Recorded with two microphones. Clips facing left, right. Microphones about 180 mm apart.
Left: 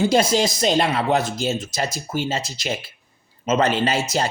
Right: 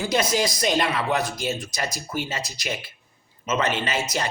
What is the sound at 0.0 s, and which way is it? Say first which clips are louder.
A man's voice: left 5 dB; 30° left (ahead or behind).